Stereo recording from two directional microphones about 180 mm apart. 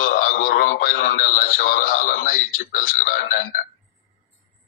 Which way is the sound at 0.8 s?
45° left (ahead or behind).